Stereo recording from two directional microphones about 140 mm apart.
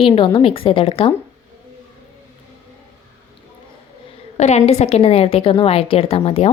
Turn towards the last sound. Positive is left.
turn(degrees=45)  # may be behind; listen again after turning